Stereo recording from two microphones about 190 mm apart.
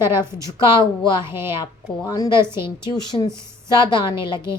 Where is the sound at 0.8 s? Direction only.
25° left (ahead or behind).